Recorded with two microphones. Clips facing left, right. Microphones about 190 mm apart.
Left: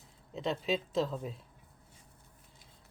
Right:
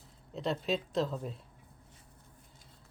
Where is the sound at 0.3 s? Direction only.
Centre (ahead or behind).